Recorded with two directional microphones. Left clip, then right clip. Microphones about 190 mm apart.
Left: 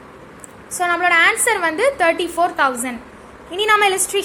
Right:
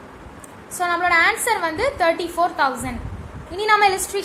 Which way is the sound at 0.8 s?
25° left (ahead or behind).